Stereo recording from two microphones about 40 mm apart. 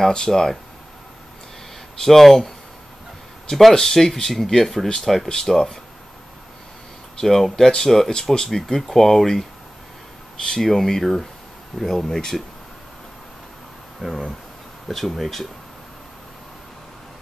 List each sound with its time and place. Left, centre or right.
0.1 s speech: centre
2.0 s speech: centre
7.2 s speech: centre
14.0 s speech: centre
14.9 s speech: centre